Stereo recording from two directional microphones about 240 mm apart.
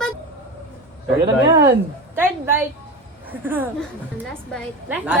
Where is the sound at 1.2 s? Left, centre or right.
Centre.